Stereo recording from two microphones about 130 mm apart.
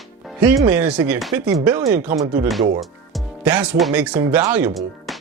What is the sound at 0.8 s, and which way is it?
Speech, 10° right (ahead or behind).